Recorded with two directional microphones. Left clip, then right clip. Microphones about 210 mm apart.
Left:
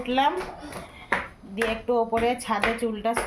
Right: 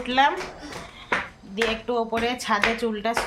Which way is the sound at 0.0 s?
Centre (ahead or behind).